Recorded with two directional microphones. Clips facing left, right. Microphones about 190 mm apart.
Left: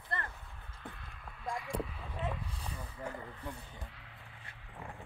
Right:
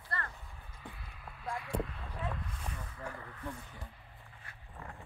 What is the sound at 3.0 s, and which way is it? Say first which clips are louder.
Speech: left 2 dB; 20° left (ahead or behind).